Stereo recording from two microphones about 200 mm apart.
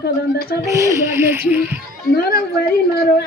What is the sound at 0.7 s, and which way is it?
Speech, 15° right (ahead or behind).